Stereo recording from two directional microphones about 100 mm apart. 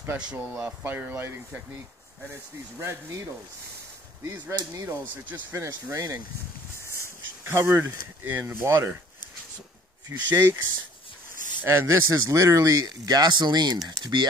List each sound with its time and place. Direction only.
0.3 s speech: 10° right (ahead or behind)
2.8 s speech: 30° right (ahead or behind)
4.9 s speech: 20° right (ahead or behind)
7.4 s speech: 25° right (ahead or behind)
10.0 s speech: 20° right (ahead or behind)
11.6 s speech: 25° right (ahead or behind); by 14.3 s 50° right (ahead or behind)